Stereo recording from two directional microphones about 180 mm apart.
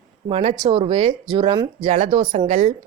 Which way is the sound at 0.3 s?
35° right (ahead or behind).